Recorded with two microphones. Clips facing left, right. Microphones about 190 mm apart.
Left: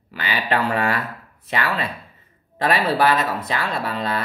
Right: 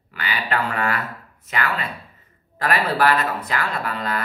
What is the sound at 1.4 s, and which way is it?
Speech, 30° left (ahead or behind).